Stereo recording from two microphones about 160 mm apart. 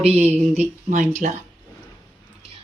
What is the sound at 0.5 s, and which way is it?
Speech, 50° right (ahead or behind).